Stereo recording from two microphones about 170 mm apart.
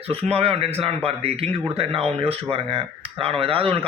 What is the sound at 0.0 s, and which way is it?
Speech, 35° right (ahead or behind).